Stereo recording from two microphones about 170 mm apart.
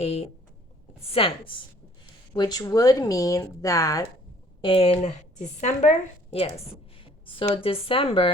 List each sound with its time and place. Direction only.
0.0 s a woman's voice: 35° left (ahead or behind); by 4.0 s 20° left (ahead or behind)
4.6 s a woman's voice: 35° left (ahead or behind)
7.0 s speech: 30° left (ahead or behind)